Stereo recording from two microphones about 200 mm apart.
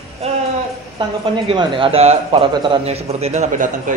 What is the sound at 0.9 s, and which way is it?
Speech, 25° right (ahead or behind).